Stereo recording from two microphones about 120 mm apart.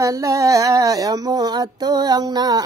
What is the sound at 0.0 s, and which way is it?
Mantra, 25° right (ahead or behind).